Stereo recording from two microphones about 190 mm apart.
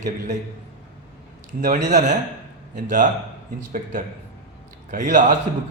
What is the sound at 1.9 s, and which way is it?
A man's voice, 40° right (ahead or behind).